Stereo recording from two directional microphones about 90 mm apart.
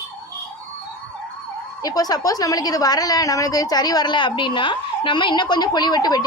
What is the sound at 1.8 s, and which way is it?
A woman's voice, 45° left (ahead or behind).